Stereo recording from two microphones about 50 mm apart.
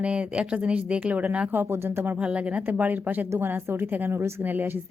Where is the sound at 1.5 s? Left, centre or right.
Right.